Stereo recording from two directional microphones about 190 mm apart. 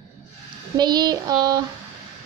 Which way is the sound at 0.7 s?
20° right (ahead or behind).